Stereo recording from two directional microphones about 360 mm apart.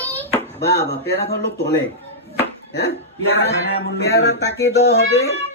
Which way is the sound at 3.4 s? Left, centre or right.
Left.